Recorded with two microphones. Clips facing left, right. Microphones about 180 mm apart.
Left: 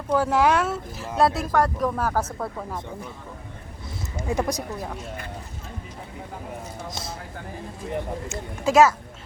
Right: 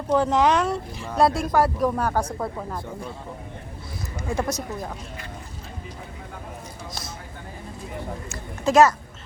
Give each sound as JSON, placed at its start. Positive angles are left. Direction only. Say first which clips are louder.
{"t": 0.1, "sound": "speech", "louder": "right 1 dB", "side_deg": 5}
{"t": 4.2, "sound": "speech", "louder": "left 1 dB", "side_deg": 20}
{"t": 8.6, "sound": "speech", "louder": "even", "side_deg": 5}